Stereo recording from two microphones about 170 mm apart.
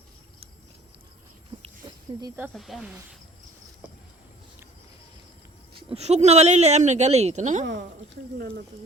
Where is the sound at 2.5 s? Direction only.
Centre (ahead or behind).